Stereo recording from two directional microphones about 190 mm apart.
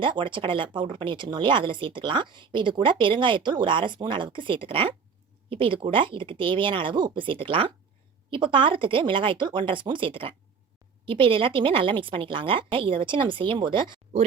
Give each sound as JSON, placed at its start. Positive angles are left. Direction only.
{"t": 0.0, "sound": "speech", "side_deg": -25}